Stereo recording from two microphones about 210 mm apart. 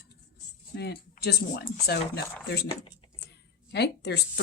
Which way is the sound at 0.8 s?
50° left (ahead or behind).